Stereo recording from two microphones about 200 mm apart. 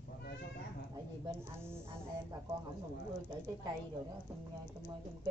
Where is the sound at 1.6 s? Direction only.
10° right (ahead or behind).